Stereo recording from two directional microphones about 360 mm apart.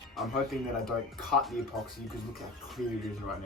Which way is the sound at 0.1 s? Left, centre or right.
Centre.